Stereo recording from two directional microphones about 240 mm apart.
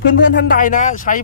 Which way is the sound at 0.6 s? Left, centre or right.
Left.